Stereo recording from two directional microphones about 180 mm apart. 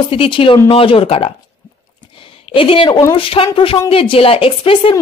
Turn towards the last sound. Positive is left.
turn(degrees=30)  # may be behind; listen again after turning